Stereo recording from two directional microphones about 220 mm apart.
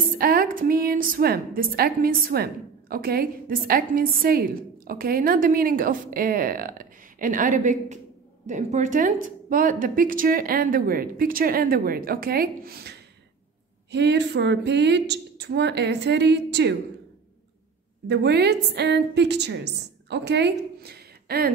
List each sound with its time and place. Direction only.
0.2 s a woman's voice: 40° right (ahead or behind)
18.0 s a woman's voice: 50° right (ahead or behind)